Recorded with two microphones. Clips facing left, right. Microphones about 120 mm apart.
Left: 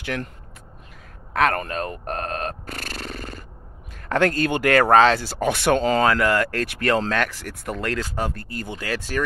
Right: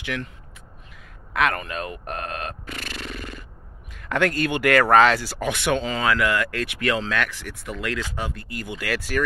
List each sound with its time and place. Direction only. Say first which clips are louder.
0.0 s speech: left 2 dB; 40° left (ahead or behind)
1.3 s a sound: left 2 dB; 40° left (ahead or behind)
3.9 s speech: left 2 dB; 35° left (ahead or behind)